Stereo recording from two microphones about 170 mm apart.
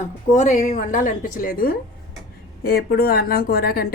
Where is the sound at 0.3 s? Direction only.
45° left (ahead or behind).